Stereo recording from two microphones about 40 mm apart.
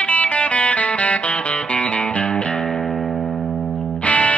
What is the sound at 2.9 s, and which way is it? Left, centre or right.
Music, centre.